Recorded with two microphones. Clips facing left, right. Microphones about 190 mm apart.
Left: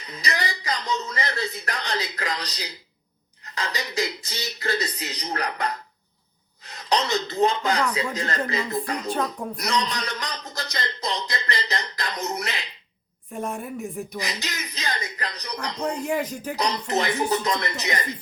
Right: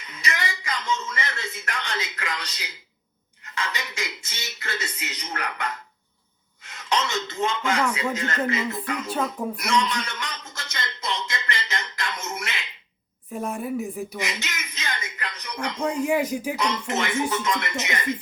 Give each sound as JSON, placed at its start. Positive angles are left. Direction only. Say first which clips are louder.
{"t": 0.0, "sound": "a man's voice", "louder": "left 2 dB", "side_deg": 35}
{"t": 13.4, "sound": "a woman's voice", "louder": "even", "side_deg": 0}
{"t": 14.2, "sound": "a man's voice", "louder": "even", "side_deg": 35}
{"t": 16.0, "sound": "speech", "louder": "right 3 dB", "side_deg": -10}
{"t": 16.6, "sound": "a man's voice", "louder": "left 6 dB", "side_deg": 35}